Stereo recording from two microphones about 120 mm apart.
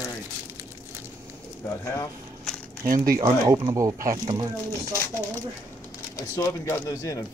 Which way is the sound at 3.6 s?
25° right (ahead or behind).